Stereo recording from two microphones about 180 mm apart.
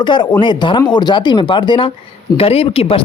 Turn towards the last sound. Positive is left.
turn(degrees=30)  # may be behind; listen again after turning